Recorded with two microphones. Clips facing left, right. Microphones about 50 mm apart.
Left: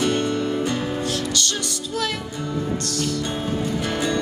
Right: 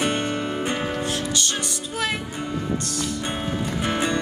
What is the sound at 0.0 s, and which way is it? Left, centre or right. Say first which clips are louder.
Music: left 2 dB; right.